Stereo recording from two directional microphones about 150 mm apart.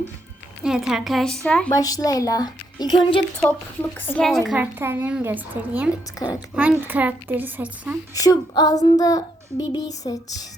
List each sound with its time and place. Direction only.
0.6 s a woman's voice: 5° right (ahead or behind)
1.7 s a woman's voice: 25° left (ahead or behind)
3.9 s a woman's voice: 10° left (ahead or behind)
4.3 s a woman's voice: centre (ahead or behind)
4.5 s a woman's voice: 15° right (ahead or behind)
8.1 s a woman's voice: 25° left (ahead or behind)